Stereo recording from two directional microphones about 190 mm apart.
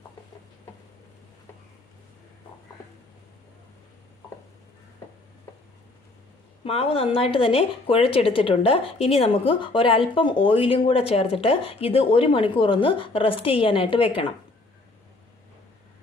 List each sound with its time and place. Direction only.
6.6 s a woman's voice: 30° left (ahead or behind)